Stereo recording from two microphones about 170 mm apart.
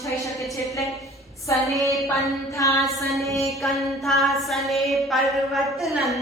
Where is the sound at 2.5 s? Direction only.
15° left (ahead or behind).